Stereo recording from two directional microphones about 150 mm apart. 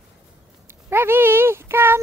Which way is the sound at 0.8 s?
15° right (ahead or behind).